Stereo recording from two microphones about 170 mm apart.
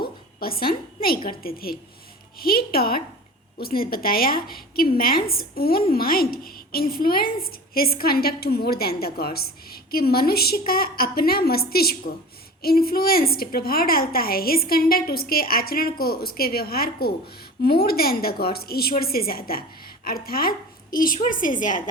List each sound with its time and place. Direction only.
0.3 s a woman's voice: 60° left (ahead or behind)